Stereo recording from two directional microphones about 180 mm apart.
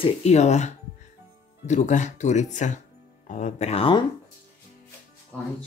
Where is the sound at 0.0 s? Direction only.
35° left (ahead or behind).